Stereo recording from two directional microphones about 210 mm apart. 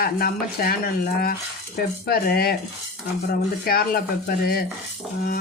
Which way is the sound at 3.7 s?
45° left (ahead or behind).